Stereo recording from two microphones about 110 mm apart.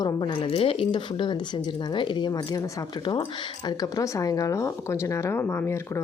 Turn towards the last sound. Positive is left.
turn(degrees=25)  # may be behind; listen again after turning